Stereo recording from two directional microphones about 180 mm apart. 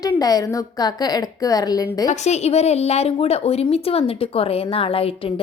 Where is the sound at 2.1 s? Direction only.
40° left (ahead or behind).